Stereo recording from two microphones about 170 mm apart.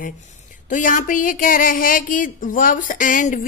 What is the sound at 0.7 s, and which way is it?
Speech, 50° left (ahead or behind).